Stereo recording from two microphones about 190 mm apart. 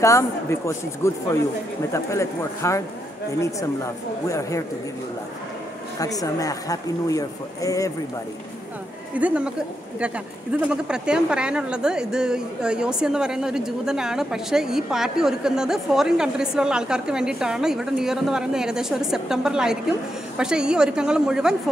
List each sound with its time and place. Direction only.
0.0 s speech: 15° left (ahead or behind)
4.3 s speech: 15° left (ahead or behind)
5.9 s speech: 20° left (ahead or behind)
9.1 s speech: 5° right (ahead or behind)
10.7 s a woman's voice: 5° right (ahead or behind)